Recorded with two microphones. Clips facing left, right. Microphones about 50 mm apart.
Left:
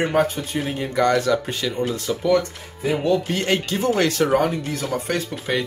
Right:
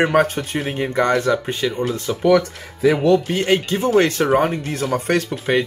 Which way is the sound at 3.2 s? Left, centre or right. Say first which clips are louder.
Right 4 dB; centre.